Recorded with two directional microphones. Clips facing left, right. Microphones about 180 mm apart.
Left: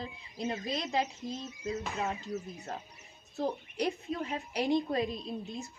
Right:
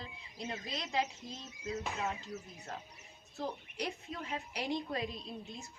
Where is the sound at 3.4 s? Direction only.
35° left (ahead or behind).